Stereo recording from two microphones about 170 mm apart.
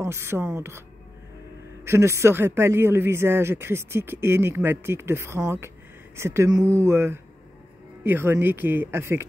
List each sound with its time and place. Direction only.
0.0 s speech: 15° right (ahead or behind)
1.9 s speech: 15° right (ahead or behind)